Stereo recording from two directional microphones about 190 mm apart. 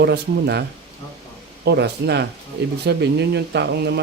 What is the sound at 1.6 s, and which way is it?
Speech, 60° right (ahead or behind).